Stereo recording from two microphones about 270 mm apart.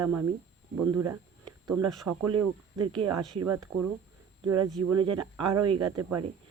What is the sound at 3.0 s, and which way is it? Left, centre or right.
Speech, right.